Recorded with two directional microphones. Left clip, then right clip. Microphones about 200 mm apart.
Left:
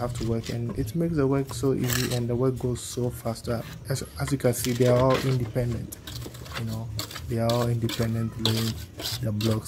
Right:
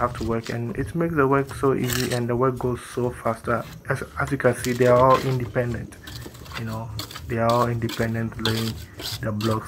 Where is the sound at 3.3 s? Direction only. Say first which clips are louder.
Right 7 dB; 45° left (ahead or behind).